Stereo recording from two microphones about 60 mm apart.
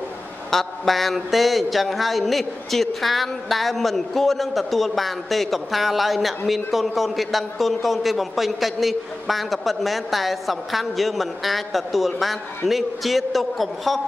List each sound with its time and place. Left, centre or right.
0.5 s speech: centre